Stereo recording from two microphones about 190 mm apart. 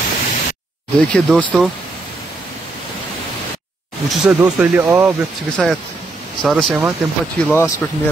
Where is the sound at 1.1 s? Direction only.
Centre (ahead or behind).